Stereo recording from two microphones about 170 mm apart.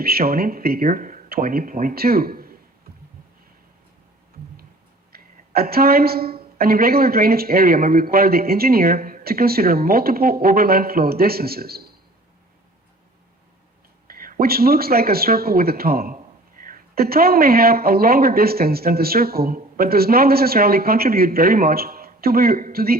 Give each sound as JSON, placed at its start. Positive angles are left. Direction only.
{"t": 0.0, "sound": "speech", "side_deg": -65}
{"t": 5.1, "sound": "speech", "side_deg": -65}
{"t": 14.1, "sound": "speech", "side_deg": -60}